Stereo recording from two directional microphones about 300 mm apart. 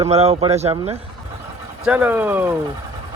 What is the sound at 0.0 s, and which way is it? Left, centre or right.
Speech, centre.